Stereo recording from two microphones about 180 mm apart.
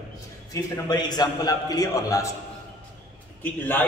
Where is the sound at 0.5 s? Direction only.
20° left (ahead or behind).